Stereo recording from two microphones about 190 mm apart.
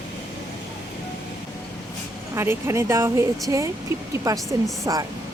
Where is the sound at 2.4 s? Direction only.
15° right (ahead or behind).